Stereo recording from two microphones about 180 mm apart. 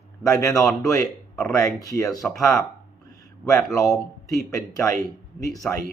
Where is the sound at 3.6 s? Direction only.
Centre (ahead or behind).